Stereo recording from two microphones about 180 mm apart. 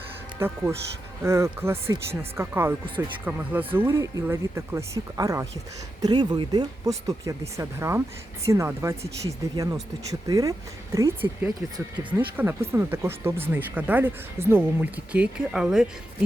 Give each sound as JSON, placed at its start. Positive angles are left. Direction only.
{"t": 0.3, "sound": "speech", "side_deg": -15}